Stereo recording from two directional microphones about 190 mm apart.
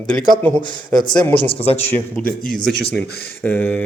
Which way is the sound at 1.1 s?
10° left (ahead or behind).